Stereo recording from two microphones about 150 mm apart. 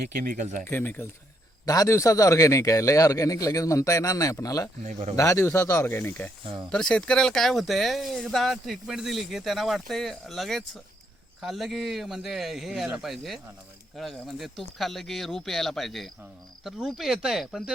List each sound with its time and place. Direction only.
0.3 s speech: 60° right (ahead or behind)
0.7 s a man's voice: 15° left (ahead or behind)
4.8 s speech: 50° right (ahead or behind)
5.1 s speech: 20° left (ahead or behind)
6.4 s speech: 35° right (ahead or behind)
6.7 s speech: 5° left (ahead or behind)